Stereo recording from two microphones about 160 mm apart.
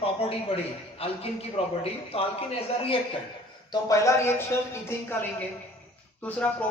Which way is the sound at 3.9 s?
20° left (ahead or behind).